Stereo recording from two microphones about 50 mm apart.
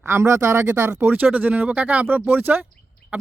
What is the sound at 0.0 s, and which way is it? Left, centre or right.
Speech, right.